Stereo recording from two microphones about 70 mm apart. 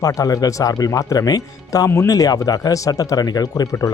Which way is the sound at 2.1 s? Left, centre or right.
Left.